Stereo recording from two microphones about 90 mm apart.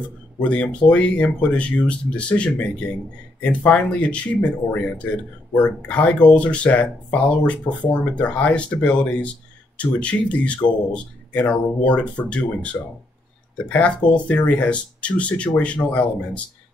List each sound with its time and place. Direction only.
0.4 s speech: 15° left (ahead or behind)